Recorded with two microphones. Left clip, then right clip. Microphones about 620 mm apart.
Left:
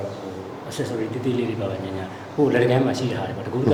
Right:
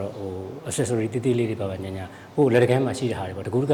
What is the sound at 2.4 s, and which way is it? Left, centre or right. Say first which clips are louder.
Speech: left 1 dB; right.